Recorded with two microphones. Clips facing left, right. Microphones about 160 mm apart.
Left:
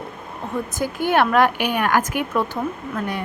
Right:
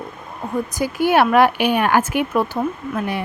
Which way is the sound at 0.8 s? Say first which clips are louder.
Right 3 dB; 15° right (ahead or behind).